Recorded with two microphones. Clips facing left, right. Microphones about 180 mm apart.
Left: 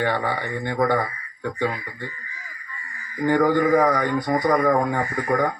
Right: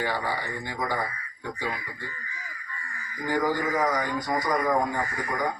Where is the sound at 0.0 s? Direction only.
65° left (ahead or behind).